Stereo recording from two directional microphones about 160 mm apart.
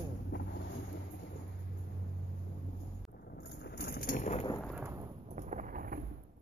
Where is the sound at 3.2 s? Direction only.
85° left; by 4.3 s 65° left (ahead or behind).